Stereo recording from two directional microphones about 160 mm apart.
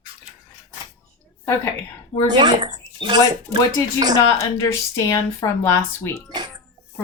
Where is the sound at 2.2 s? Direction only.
25° right (ahead or behind).